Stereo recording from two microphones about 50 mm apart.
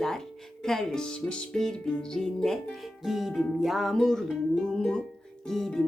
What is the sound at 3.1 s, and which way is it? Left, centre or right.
Music, centre.